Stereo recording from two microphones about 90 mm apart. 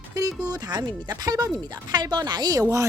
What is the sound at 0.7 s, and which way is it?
A woman's voice, 50° right (ahead or behind).